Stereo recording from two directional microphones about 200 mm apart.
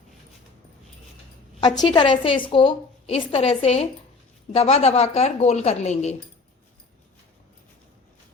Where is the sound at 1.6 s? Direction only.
20° left (ahead or behind).